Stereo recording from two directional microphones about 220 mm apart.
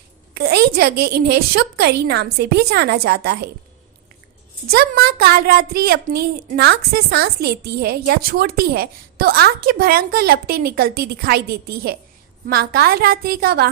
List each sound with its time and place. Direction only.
0.3 s a woman's voice: 45° right (ahead or behind)
4.7 s a woman's voice: 45° right (ahead or behind)